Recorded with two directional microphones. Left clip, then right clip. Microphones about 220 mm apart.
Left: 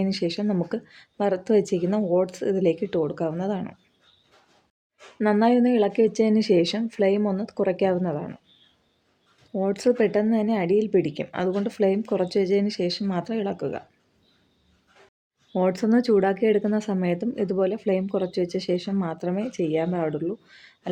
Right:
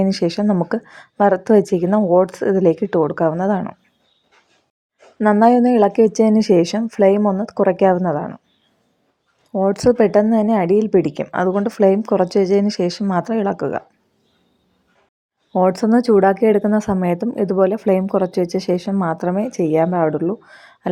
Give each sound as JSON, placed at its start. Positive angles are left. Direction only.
{"t": 0.0, "sound": "speech", "side_deg": -25}
{"t": 5.1, "sound": "speech", "side_deg": -15}
{"t": 9.5, "sound": "speech", "side_deg": -20}
{"t": 15.5, "sound": "speech", "side_deg": -20}